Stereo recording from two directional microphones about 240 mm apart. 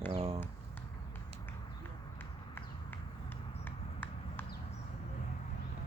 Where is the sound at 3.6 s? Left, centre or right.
Centre.